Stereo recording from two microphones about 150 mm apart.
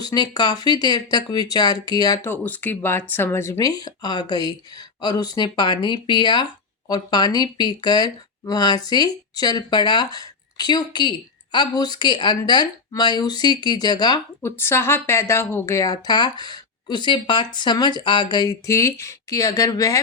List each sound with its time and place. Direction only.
0.0 s speech: 25° left (ahead or behind)
14.6 s speech: 15° left (ahead or behind)